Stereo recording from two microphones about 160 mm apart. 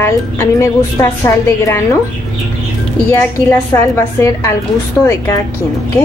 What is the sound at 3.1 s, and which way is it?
A woman's voice, 15° left (ahead or behind).